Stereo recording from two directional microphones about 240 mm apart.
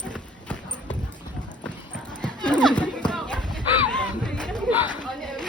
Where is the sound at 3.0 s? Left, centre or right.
Centre.